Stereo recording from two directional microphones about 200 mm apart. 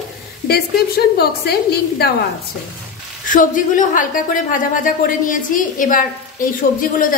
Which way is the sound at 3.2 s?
40° left (ahead or behind).